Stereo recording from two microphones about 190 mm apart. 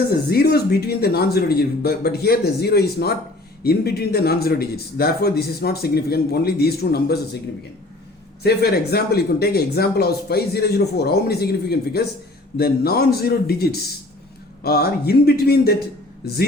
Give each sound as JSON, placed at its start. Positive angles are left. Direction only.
{"t": 0.1, "sound": "speech", "side_deg": 55}
{"t": 8.4, "sound": "speech", "side_deg": 55}